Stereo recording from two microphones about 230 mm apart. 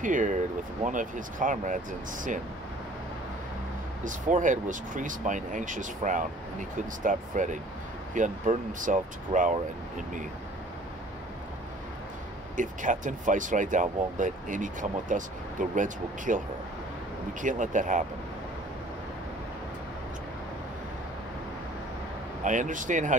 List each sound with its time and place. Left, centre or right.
0.0 s speech: right
4.0 s speech: right
12.5 s speech: right
22.4 s speech: right